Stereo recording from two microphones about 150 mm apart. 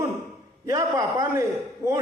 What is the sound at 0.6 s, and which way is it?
Speech, 20° right (ahead or behind).